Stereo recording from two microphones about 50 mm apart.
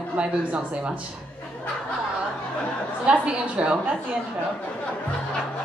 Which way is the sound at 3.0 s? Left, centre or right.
Right.